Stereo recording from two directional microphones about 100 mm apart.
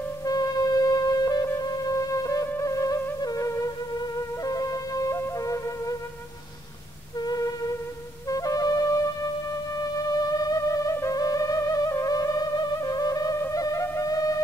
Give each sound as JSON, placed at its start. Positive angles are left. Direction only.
{"t": 0.2, "sound": "music", "side_deg": 40}
{"t": 4.4, "sound": "flute", "side_deg": 35}
{"t": 8.3, "sound": "music", "side_deg": 35}